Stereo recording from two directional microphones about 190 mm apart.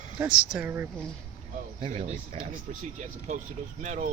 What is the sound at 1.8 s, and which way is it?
Speech, 35° right (ahead or behind).